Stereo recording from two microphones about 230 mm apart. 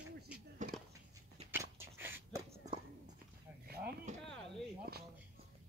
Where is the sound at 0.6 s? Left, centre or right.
Right.